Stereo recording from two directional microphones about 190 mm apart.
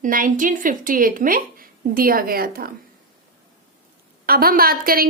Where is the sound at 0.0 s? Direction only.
45° right (ahead or behind).